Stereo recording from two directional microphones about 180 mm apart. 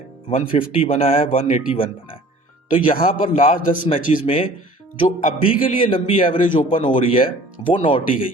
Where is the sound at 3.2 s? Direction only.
30° left (ahead or behind).